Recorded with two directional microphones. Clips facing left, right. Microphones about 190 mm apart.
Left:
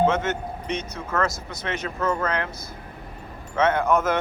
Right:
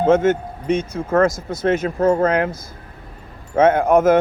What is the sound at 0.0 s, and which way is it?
A man's voice, 50° right (ahead or behind).